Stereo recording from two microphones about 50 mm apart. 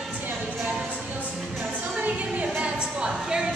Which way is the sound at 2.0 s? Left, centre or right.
Right.